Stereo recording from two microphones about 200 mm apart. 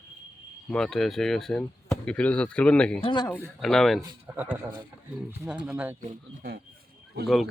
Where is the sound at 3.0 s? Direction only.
20° left (ahead or behind).